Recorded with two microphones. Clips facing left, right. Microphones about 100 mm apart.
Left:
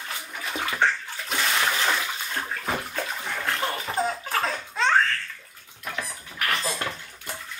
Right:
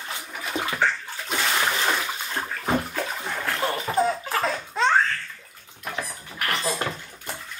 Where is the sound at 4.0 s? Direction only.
5° right (ahead or behind).